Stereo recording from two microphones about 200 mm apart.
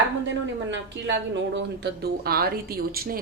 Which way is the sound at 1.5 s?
55° right (ahead or behind).